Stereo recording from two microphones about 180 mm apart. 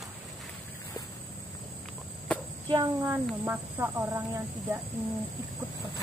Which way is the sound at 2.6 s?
25° right (ahead or behind).